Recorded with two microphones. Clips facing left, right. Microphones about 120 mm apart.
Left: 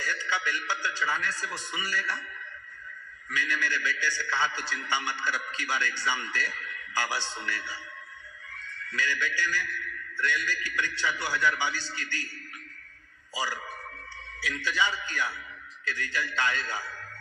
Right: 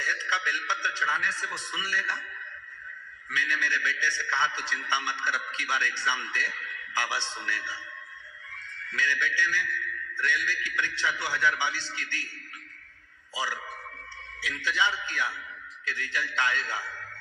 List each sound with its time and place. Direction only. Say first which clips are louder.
0.0 s a man's voice: even; 40° left (ahead or behind)
3.2 s a man's voice: even; 40° left (ahead or behind)
8.9 s a man's voice: right 1 dB; 40° left (ahead or behind)
13.3 s a man's voice: even; 40° left (ahead or behind)
14.6 s a man's voice: right 1 dB; 40° left (ahead or behind)